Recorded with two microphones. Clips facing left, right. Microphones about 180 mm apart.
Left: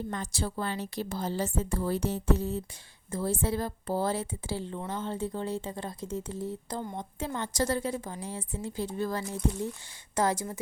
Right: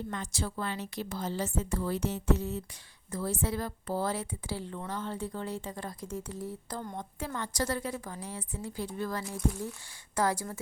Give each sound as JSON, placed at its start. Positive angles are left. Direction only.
{"t": 0.1, "sound": "speech", "side_deg": 35}